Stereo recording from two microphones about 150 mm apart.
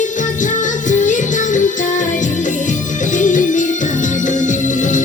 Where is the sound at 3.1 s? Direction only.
60° left (ahead or behind).